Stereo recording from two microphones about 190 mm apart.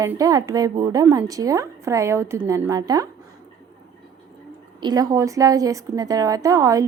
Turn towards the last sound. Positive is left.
turn(degrees=-15)  # may be behind; listen again after turning